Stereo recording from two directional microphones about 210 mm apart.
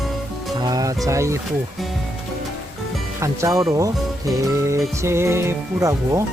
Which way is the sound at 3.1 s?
15° right (ahead or behind).